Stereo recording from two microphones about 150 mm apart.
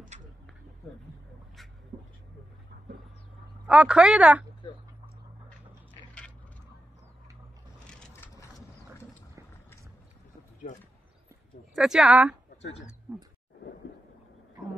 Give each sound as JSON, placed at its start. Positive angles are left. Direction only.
{"t": 1.9, "sound": "vehicle", "side_deg": -30}
{"t": 3.6, "sound": "a woman's voice", "side_deg": -5}
{"t": 7.8, "sound": "coin", "side_deg": 5}
{"t": 11.7, "sound": "speech", "side_deg": -5}
{"t": 13.1, "sound": "roaring cats", "side_deg": -5}